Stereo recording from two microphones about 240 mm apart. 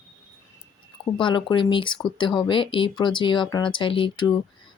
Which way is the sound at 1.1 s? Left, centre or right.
Centre.